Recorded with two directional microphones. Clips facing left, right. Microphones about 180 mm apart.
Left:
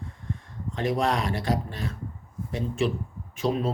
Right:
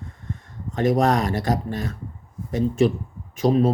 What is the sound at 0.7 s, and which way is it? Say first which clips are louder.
Speech: right 6 dB; 45° right (ahead or behind).